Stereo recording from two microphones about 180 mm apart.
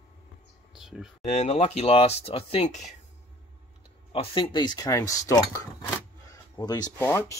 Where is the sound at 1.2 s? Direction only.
40° left (ahead or behind).